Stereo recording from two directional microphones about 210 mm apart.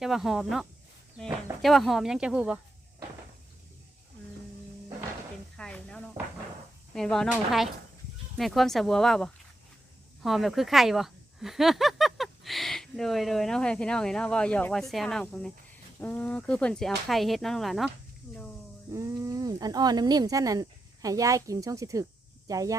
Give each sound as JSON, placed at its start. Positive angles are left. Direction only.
{"t": 0.0, "sound": "speech", "side_deg": 0}
{"t": 5.5, "sound": "a sound", "side_deg": 5}
{"t": 6.9, "sound": "speech", "side_deg": 0}
{"t": 18.9, "sound": "speech", "side_deg": -15}